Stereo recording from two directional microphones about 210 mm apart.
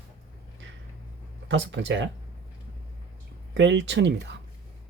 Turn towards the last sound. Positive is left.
turn(degrees=-55)  # may be behind; listen again after turning